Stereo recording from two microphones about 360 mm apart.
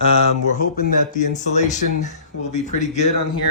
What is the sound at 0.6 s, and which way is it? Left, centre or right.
Speech, left.